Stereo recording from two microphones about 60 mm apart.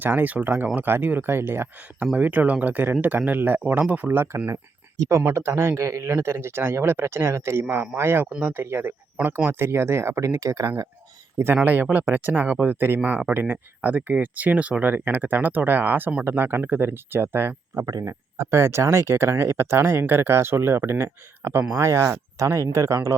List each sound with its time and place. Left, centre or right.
0.0 s speech: right
2.1 s speech: right
6.1 s speech: right
10.2 s speech: right
11.3 s speech: right
13.0 s speech: right
17.7 s speech: right